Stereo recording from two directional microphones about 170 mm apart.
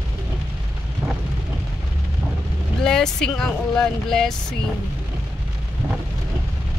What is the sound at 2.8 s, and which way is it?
Speech, 5° left (ahead or behind).